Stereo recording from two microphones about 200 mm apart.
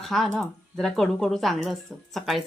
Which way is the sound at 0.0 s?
Centre (ahead or behind).